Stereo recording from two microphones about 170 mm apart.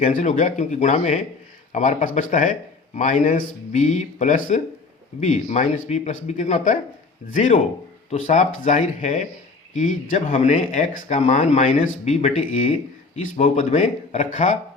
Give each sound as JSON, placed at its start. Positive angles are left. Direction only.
{"t": 0.0, "sound": "a man's voice", "side_deg": 50}
{"t": 8.1, "sound": "a man's voice", "side_deg": 50}